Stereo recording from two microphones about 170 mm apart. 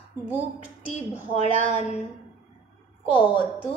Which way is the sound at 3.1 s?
30° left (ahead or behind).